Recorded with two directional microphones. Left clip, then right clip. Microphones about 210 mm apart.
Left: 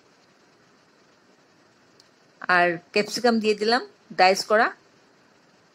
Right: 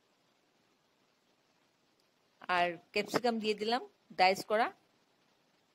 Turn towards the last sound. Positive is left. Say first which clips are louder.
# left 11 dB
turn(degrees=-40)  # may be behind; listen again after turning